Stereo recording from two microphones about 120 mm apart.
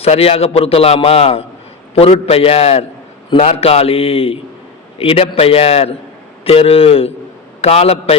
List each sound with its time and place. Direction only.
0.0 s a man's voice: 55° left (ahead or behind)